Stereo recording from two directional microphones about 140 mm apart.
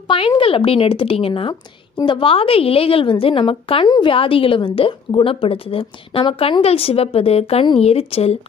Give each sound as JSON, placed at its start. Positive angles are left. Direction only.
{"t": 0.4, "sound": "a woman's voice", "side_deg": 40}